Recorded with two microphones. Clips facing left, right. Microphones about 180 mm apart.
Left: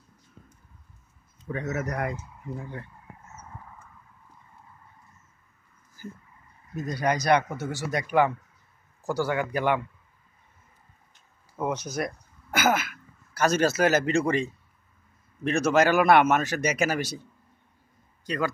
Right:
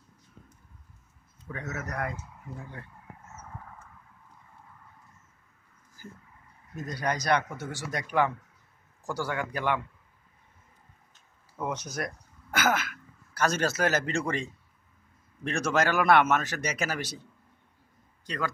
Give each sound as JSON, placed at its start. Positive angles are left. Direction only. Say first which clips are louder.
{"t": 1.4, "sound": "speech", "louder": "left 7 dB", "side_deg": 20}
{"t": 6.7, "sound": "speech", "louder": "left 5 dB", "side_deg": 10}
{"t": 11.6, "sound": "speech", "louder": "left 4 dB", "side_deg": 5}
{"t": 18.2, "sound": "a man's voice", "louder": "left 5 dB", "side_deg": 10}